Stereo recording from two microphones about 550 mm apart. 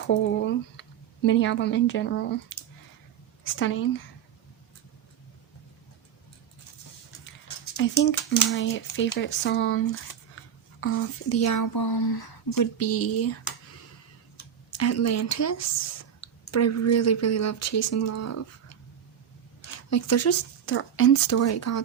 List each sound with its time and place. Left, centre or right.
0.1 s a woman's voice: centre
7.8 s a child's voice: left
12.7 s speech: left
14.3 s speech: left
19.6 s speech: left